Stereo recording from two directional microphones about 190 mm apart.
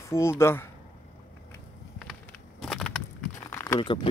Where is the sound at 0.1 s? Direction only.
15° left (ahead or behind).